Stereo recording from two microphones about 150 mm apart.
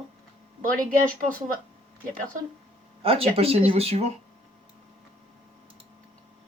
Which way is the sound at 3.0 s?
40° right (ahead or behind).